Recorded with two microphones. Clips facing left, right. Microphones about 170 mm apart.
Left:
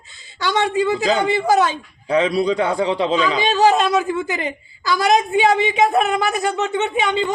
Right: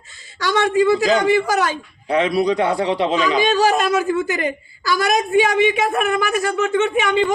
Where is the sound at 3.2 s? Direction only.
25° left (ahead or behind).